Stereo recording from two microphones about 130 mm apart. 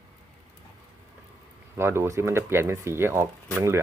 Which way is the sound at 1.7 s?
20° right (ahead or behind).